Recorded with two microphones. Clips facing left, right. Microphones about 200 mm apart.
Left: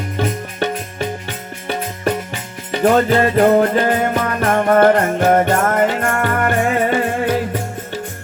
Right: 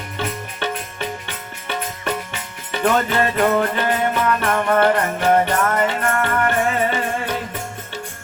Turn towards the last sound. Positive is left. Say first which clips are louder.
# left 5 dB
turn(degrees=35)  # may be behind; listen again after turning